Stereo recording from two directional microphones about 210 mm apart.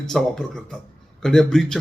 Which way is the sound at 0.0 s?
Centre (ahead or behind).